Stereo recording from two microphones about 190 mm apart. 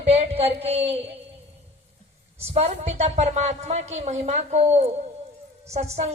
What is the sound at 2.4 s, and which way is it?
Speech, 30° right (ahead or behind).